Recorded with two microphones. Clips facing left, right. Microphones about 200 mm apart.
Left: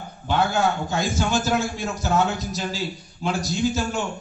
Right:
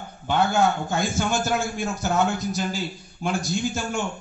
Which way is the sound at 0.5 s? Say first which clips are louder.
Right 1 dB; 55° right (ahead or behind).